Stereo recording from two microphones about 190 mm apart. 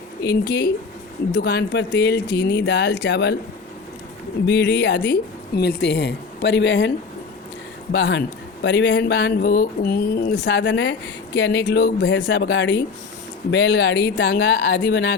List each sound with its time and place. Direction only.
0.2 s speech: 60° left (ahead or behind)
4.4 s speech: 65° left (ahead or behind)
7.9 s speech: 65° left (ahead or behind)